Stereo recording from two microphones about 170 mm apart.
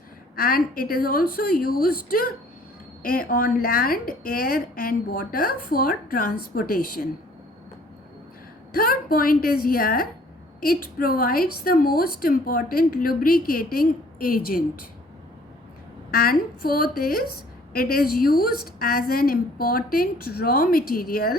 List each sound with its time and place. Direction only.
0.3 s a woman's voice: 60° left (ahead or behind)
8.7 s a woman's voice: 60° left (ahead or behind)
16.1 s a woman's voice: 60° left (ahead or behind)